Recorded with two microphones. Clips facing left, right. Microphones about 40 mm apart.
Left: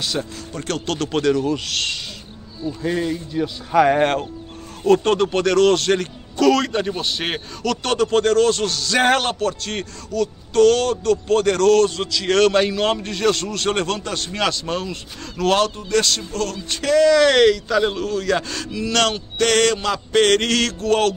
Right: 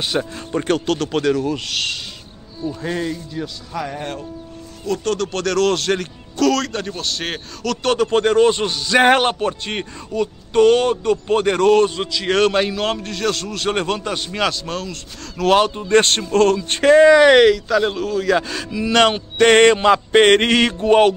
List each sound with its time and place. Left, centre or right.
0.0 s a man's voice: right
0.8 s speech: centre
3.7 s speech: left
4.8 s speech: left
5.3 s speech: centre
15.4 s speech: centre
15.7 s speech: right; by 17.6 s centre
17.6 s a man's voice: centre; by 21.1 s right